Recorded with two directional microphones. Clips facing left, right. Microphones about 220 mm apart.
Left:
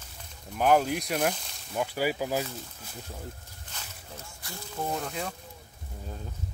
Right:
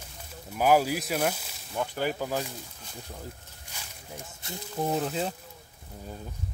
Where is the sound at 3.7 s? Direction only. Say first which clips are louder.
Even; 10° right (ahead or behind).